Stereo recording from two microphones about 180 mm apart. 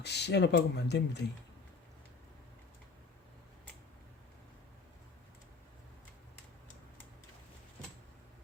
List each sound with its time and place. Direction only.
0.0 s speech: 70° left (ahead or behind)